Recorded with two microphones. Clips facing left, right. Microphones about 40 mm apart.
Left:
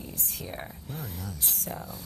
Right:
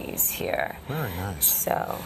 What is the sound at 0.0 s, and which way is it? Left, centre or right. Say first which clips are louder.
A woman's voice: right 9 dB; right.